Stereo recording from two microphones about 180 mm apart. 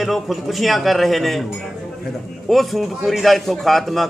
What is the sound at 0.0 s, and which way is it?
A man's voice, centre (ahead or behind).